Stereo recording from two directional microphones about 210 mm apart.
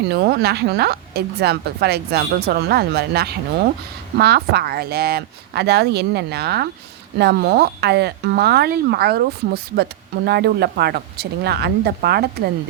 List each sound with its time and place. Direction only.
0.1 s speech: 50° right (ahead or behind)